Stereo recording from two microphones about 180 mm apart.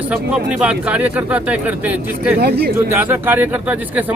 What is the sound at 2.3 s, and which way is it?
Speech, 65° right (ahead or behind).